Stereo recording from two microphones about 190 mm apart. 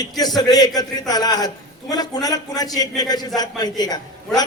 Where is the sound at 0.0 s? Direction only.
20° left (ahead or behind).